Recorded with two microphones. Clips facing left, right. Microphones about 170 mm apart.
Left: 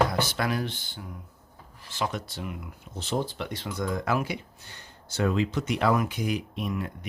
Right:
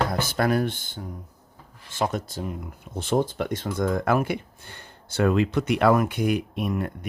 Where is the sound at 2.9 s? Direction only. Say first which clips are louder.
Right 6 dB; 50° right (ahead or behind).